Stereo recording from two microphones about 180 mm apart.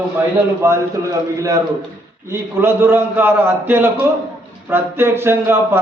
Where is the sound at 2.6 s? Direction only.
10° right (ahead or behind).